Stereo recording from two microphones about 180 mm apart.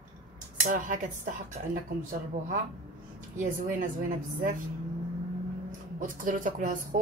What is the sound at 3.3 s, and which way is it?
Speech, 45° right (ahead or behind).